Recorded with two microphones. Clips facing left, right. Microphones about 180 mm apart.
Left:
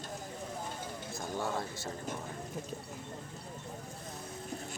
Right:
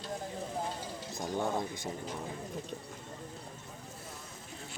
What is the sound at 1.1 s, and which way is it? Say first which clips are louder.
Speech: right 3 dB; 20° right (ahead or behind).